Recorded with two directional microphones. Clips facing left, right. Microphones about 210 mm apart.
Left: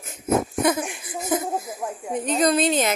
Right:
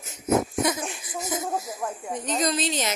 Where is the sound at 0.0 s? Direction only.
55° left (ahead or behind).